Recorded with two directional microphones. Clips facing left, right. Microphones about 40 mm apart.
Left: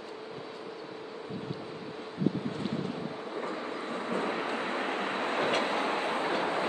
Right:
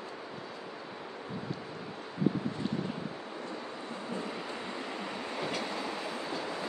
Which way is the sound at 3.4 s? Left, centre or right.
Left.